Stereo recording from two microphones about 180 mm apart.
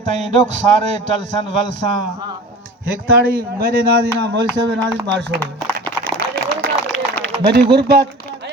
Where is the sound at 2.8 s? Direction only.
55° right (ahead or behind); by 5.4 s 70° right (ahead or behind).